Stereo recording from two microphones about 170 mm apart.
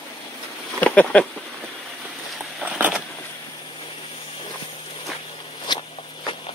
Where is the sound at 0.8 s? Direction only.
10° left (ahead or behind).